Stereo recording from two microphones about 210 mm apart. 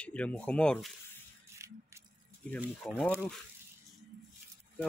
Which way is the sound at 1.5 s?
15° right (ahead or behind).